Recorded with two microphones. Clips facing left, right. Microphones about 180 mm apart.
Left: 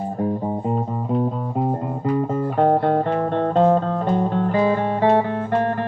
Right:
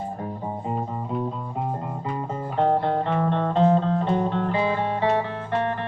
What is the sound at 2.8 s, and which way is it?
Music, 45° left (ahead or behind).